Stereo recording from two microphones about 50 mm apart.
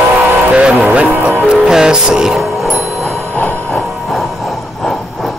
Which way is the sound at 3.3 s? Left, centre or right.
Left.